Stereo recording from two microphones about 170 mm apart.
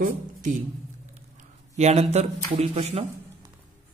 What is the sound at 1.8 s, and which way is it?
Speech, 40° right (ahead or behind).